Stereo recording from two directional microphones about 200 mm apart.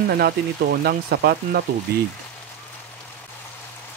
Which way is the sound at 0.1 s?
50° right (ahead or behind).